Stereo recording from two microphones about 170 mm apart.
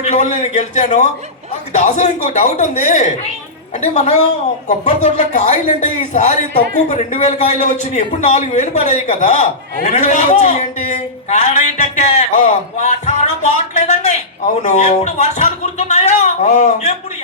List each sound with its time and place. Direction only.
0.0 s a man's voice: 45° left (ahead or behind)